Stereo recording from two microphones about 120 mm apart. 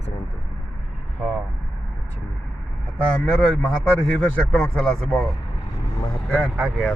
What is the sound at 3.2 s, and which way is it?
Speech, 5° left (ahead or behind).